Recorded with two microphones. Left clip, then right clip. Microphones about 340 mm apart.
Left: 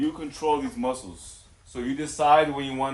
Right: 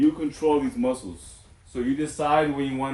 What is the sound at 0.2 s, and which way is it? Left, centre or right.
A man's voice, centre.